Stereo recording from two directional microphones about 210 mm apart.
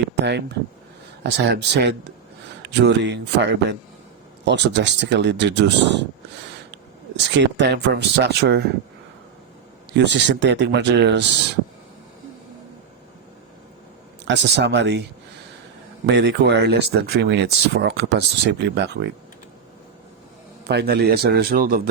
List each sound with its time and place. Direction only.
0.3 s speech: 55° right (ahead or behind)
7.3 s speech: 55° right (ahead or behind)
9.9 s speech: 55° right (ahead or behind)
14.3 s speech: 55° right (ahead or behind)
16.0 s speech: 55° right (ahead or behind)
20.7 s speech: 50° right (ahead or behind)